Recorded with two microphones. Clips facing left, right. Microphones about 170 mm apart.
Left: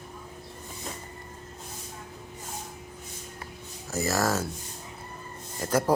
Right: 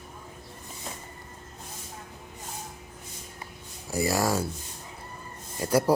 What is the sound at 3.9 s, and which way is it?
Speech, 15° right (ahead or behind).